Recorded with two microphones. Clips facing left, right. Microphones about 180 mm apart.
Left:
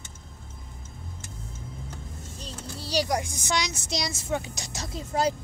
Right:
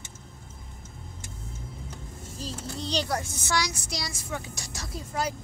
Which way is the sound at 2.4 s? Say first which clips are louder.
Right 5 dB; centre (ahead or behind).